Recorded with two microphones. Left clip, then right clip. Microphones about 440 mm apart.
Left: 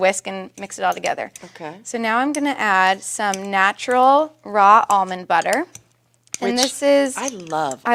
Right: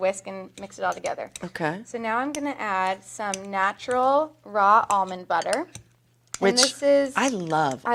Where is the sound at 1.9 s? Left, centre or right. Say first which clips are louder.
Left 12 dB; left.